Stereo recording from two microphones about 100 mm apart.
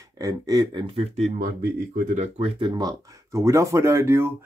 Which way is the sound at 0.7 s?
60° right (ahead or behind).